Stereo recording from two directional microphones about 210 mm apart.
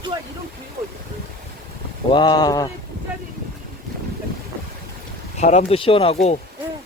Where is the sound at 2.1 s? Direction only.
20° left (ahead or behind).